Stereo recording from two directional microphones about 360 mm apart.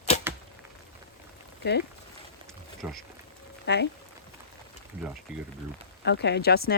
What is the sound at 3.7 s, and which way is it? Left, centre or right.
Speech, left.